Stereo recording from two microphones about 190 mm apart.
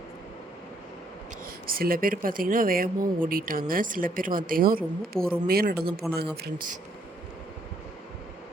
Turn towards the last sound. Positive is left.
turn(degrees=-50)  # may be behind; listen again after turning